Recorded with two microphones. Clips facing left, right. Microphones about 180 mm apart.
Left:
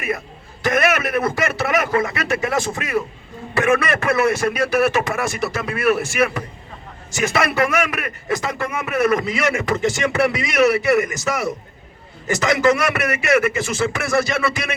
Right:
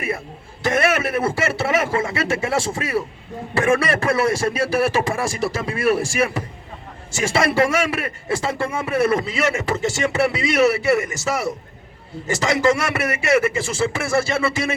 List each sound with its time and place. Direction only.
0.6 s a man's voice: 30° right (ahead or behind)